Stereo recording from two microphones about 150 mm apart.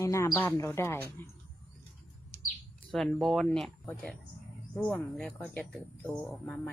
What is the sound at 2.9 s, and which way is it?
Speech, centre (ahead or behind).